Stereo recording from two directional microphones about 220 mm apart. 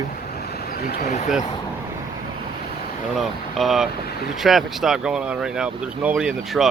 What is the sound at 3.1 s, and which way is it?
Speech, centre (ahead or behind).